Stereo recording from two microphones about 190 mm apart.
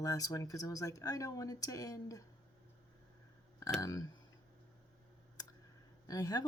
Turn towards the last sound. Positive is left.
turn(degrees=20)  # may be behind; listen again after turning